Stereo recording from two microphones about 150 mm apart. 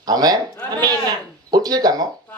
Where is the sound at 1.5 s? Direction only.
25° right (ahead or behind).